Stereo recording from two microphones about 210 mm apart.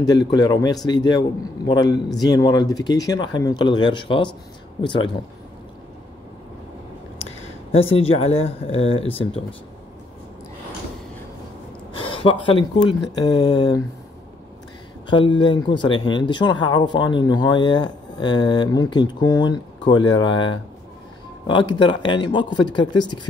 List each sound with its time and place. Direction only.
0.0 s speech: 20° left (ahead or behind)
7.9 s speech: 30° left (ahead or behind)
11.9 s speech: 25° left (ahead or behind)
15.0 s speech: 20° left (ahead or behind)